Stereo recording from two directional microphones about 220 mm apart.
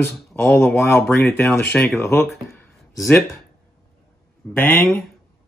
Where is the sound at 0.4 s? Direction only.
10° left (ahead or behind).